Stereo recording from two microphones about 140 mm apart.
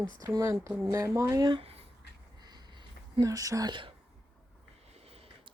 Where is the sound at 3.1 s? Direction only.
25° right (ahead or behind).